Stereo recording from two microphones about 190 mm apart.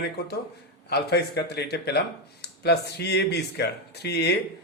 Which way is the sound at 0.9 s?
60° left (ahead or behind).